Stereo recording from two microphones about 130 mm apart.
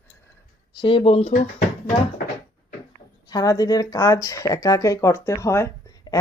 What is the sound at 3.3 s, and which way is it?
Speech, 25° left (ahead or behind).